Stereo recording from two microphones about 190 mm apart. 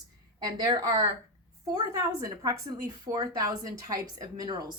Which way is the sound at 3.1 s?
20° right (ahead or behind).